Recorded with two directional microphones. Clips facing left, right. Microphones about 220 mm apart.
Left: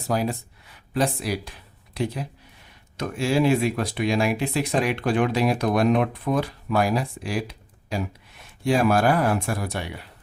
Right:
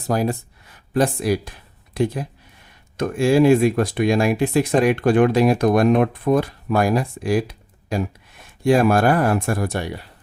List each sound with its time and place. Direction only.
0.1 s speech: 45° right (ahead or behind)